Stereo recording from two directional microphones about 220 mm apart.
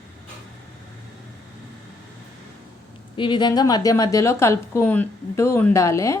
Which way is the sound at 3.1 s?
20° left (ahead or behind).